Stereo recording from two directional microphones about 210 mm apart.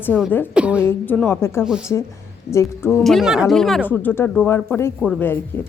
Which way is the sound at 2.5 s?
10° left (ahead or behind).